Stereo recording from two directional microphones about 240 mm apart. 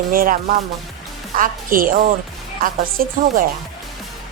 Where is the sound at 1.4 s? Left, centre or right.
Right.